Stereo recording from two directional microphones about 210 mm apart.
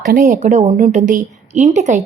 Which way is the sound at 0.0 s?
40° right (ahead or behind).